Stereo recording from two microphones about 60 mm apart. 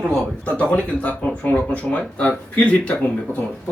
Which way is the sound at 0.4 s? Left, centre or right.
Left.